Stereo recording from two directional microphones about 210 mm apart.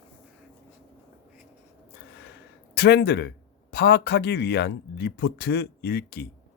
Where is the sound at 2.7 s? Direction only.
50° left (ahead or behind).